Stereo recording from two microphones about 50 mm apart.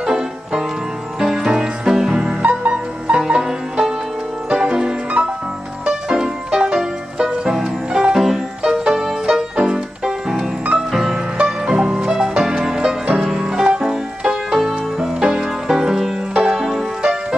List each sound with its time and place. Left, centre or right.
0.0 s music: centre
3.2 s music: centre
5.2 s music: right
5.9 s music: centre